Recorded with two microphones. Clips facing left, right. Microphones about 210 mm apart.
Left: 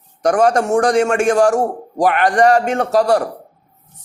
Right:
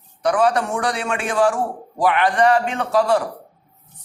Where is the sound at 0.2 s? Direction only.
45° left (ahead or behind).